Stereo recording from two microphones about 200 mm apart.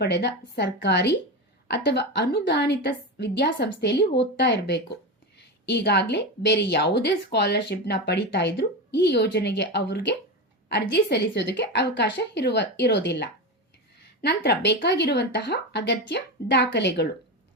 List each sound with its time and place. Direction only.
0.0 s a woman's voice: 60° left (ahead or behind)